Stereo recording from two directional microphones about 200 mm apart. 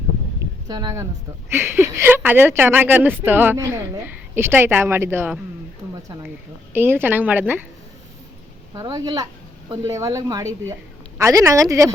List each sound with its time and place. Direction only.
0.7 s speech: 20° right (ahead or behind)
6.7 s speech: 10° right (ahead or behind)
8.7 s speech: 15° right (ahead or behind)